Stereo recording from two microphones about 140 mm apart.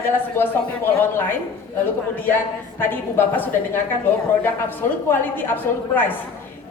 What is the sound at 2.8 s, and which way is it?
A woman's voice, 15° left (ahead or behind).